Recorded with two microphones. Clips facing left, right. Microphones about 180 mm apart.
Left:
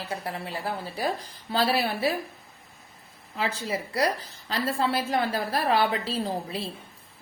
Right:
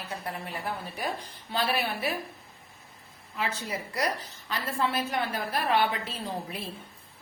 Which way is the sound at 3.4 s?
30° left (ahead or behind).